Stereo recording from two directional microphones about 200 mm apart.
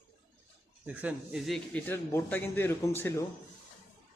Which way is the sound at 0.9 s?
5° right (ahead or behind).